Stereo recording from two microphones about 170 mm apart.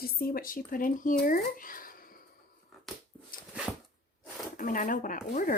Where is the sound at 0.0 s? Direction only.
60° left (ahead or behind).